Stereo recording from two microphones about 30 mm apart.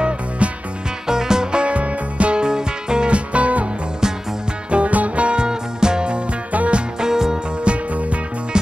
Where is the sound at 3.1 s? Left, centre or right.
Right.